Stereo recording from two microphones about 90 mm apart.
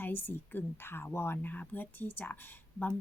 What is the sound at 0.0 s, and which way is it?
Speech, 25° left (ahead or behind).